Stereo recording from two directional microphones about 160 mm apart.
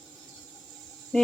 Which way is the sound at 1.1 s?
5° left (ahead or behind).